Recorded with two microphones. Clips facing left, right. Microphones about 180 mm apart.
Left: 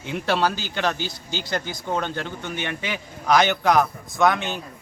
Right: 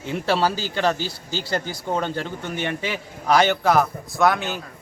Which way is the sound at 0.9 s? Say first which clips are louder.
Right 1 dB; 35° right (ahead or behind).